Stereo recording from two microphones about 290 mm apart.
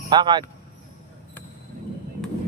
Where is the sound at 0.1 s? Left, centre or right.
Centre.